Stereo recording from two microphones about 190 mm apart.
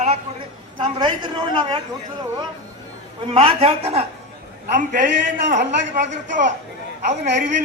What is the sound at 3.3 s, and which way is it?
Speech, 30° right (ahead or behind).